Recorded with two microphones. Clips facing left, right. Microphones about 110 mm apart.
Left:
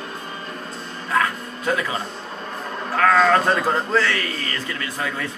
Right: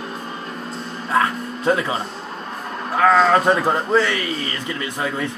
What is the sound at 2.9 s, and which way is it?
Speech, 15° right (ahead or behind).